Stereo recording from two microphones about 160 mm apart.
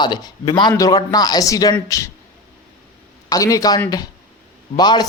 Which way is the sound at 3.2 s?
20° left (ahead or behind).